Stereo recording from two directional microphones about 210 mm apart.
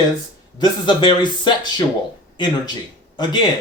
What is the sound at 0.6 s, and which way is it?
Speech, 20° left (ahead or behind).